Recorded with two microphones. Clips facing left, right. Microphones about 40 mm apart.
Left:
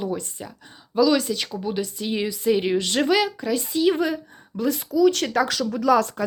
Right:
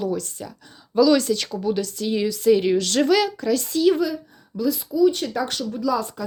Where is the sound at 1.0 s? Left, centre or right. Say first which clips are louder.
Right 2 dB; centre.